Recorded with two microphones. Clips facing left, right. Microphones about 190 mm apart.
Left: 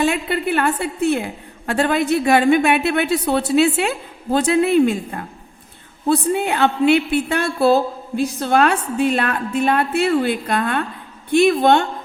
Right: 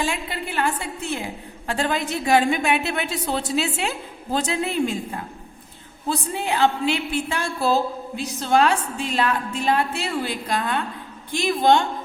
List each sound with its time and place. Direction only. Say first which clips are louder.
0.0 s a woman's voice: left 8 dB; 60° left (ahead or behind)